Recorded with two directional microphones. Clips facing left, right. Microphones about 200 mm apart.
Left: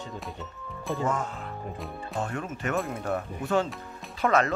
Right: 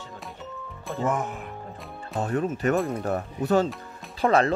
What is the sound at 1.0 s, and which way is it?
Speech, 20° right (ahead or behind).